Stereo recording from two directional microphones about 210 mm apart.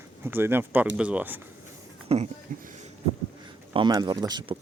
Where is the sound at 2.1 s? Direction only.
30° right (ahead or behind).